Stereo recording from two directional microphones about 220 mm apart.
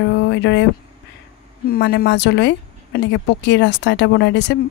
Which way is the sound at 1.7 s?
45° left (ahead or behind).